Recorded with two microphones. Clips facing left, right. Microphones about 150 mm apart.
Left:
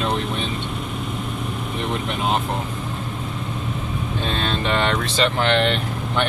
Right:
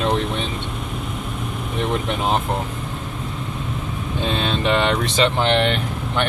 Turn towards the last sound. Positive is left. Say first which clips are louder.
# right 1 dB
turn(degrees=-15)  # may be behind; listen again after turning